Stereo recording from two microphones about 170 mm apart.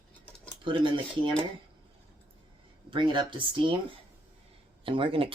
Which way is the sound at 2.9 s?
30° right (ahead or behind).